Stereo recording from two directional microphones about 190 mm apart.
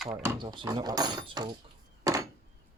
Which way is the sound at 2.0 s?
20° right (ahead or behind).